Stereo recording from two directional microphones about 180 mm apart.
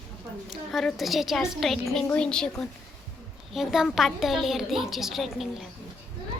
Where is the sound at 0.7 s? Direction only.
Centre (ahead or behind).